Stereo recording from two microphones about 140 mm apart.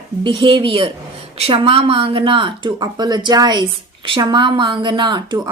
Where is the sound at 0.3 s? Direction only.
35° right (ahead or behind).